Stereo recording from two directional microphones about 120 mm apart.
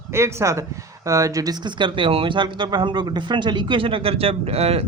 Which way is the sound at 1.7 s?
45° right (ahead or behind).